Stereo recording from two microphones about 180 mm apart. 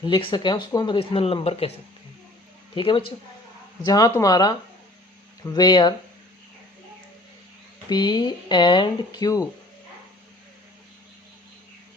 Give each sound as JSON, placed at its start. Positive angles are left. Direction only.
{"t": 0.0, "sound": "speech", "side_deg": 25}
{"t": 2.7, "sound": "speech", "side_deg": 30}
{"t": 7.9, "sound": "speech", "side_deg": 25}